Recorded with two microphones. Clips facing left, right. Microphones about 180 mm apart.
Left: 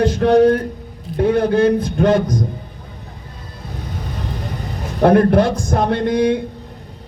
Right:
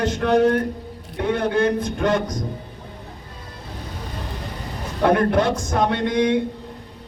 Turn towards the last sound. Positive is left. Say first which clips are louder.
# left 3 dB
turn(degrees=35)  # may be behind; listen again after turning